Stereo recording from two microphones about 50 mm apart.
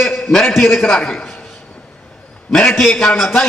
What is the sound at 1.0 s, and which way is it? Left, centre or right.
Speech, centre.